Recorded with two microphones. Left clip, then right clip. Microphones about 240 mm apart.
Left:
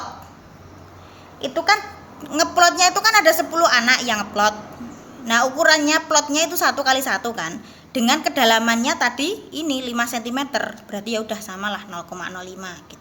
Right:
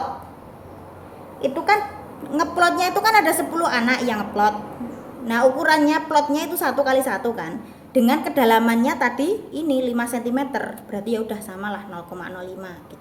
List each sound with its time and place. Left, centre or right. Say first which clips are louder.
1.4 s a woman's voice: even; centre